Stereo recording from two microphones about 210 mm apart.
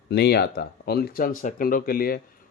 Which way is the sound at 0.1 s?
50° left (ahead or behind).